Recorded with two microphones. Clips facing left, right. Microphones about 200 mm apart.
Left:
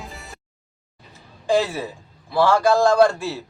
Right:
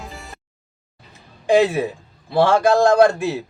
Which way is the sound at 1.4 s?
20° right (ahead or behind).